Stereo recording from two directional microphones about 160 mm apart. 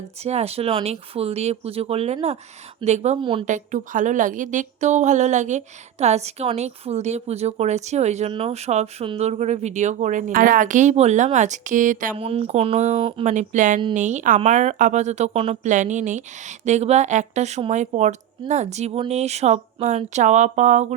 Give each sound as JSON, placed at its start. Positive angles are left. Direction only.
{"t": 0.2, "sound": "a woman's voice", "side_deg": -40}
{"t": 3.2, "sound": "speech", "side_deg": -30}
{"t": 3.4, "sound": "a woman's voice", "side_deg": -50}
{"t": 12.1, "sound": "speech", "side_deg": -35}
{"t": 13.3, "sound": "a woman's voice", "side_deg": -50}
{"t": 15.7, "sound": "a woman's voice", "side_deg": -50}